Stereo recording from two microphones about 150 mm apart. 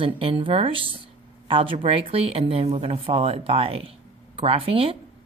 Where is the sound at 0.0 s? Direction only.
35° right (ahead or behind).